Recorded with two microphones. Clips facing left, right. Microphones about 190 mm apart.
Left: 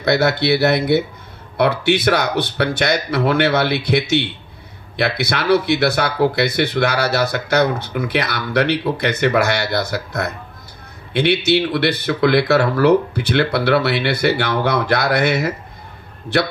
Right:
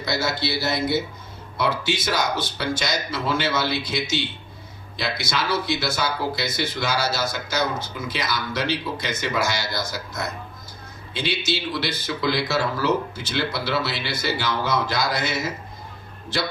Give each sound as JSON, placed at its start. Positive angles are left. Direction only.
{"t": 0.0, "sound": "speech", "side_deg": 60}